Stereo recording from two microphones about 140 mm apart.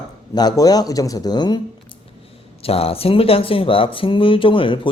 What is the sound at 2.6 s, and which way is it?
Speech, 45° left (ahead or behind).